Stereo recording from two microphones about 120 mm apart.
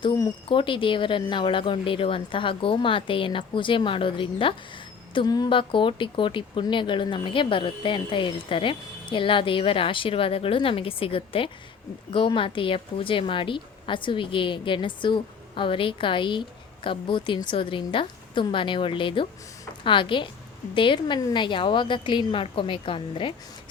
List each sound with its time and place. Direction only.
0.4 s a woman's voice: 45° left (ahead or behind)
5.1 s a woman's voice: 35° left (ahead or behind)